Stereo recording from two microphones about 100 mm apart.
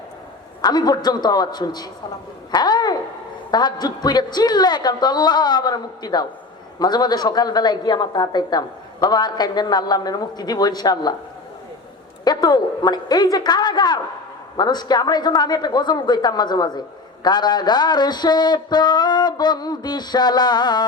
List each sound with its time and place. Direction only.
0.6 s a woman's voice: 45° left (ahead or behind)
2.5 s a sound: 45° left (ahead or behind)
3.5 s a woman's voice: 45° left (ahead or behind)
12.2 s a woman's voice: 45° left (ahead or behind)